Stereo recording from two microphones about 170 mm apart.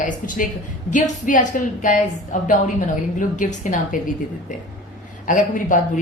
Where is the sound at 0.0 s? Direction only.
50° left (ahead or behind).